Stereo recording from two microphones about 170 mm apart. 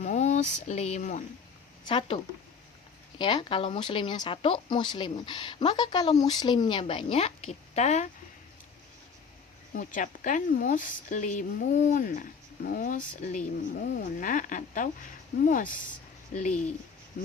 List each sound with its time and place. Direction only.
0.0 s speech: 45° left (ahead or behind)
1.9 s speech: 30° left (ahead or behind)
3.2 s speech: 25° left (ahead or behind); by 8.1 s 45° left (ahead or behind)
9.7 s a woman's voice: 50° left (ahead or behind)
14.0 s a woman's voice: 50° left (ahead or behind)
17.2 s speech: 60° left (ahead or behind)